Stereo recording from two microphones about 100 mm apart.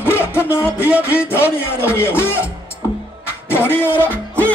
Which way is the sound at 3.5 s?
20° left (ahead or behind).